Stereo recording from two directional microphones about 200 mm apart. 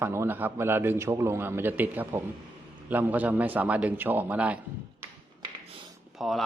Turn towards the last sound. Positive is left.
turn(degrees=0)  # may be behind; listen again after turning